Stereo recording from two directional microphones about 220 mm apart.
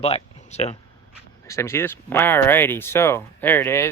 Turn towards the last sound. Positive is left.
turn(degrees=10)  # may be behind; listen again after turning